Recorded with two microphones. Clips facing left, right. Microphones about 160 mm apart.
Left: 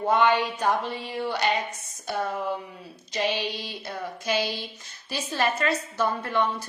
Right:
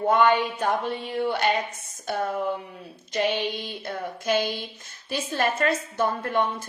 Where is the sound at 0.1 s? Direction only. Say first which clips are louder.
Right 1 dB; 50° right (ahead or behind).